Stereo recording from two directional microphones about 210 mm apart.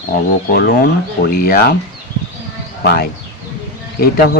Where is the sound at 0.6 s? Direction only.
50° left (ahead or behind).